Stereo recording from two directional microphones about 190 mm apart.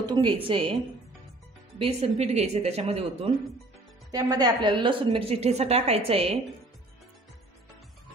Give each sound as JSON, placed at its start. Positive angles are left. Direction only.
{"t": 0.0, "sound": "a woman's voice", "side_deg": -25}
{"t": 1.8, "sound": "a woman's voice", "side_deg": -35}
{"t": 4.1, "sound": "a woman's voice", "side_deg": -20}